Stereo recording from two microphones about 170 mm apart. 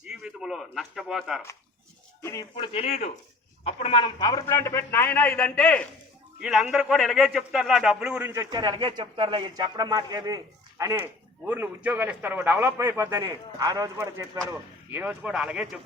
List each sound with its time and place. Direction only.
0.0 s speech: 5° right (ahead or behind)
2.2 s speech: 20° left (ahead or behind)
2.7 s a man's voice: 35° left (ahead or behind); by 5.8 s 10° left (ahead or behind)
6.4 s a man's voice: 5° right (ahead or behind)
8.4 s a man's voice: 25° right (ahead or behind); by 15.8 s 5° right (ahead or behind)